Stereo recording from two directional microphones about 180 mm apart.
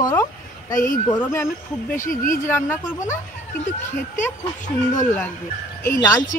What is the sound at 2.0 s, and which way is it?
Speech, 45° left (ahead or behind).